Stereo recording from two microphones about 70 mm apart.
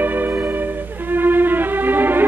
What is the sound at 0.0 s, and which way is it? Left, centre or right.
Music, right.